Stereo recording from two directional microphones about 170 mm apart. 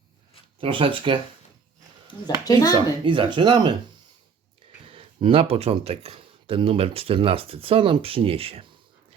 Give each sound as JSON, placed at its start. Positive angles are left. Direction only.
{"t": 0.6, "sound": "speech", "side_deg": -30}
{"t": 2.0, "sound": "speech", "side_deg": 20}
{"t": 2.7, "sound": "speech", "side_deg": -30}
{"t": 4.8, "sound": "speech", "side_deg": -30}